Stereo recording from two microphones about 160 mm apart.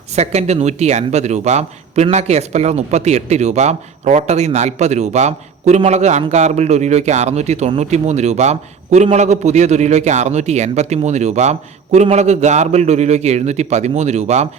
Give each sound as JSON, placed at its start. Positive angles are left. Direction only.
{"t": 0.2, "sound": "speech", "side_deg": -45}